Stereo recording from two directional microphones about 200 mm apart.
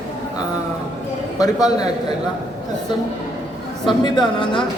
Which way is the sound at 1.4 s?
20° left (ahead or behind).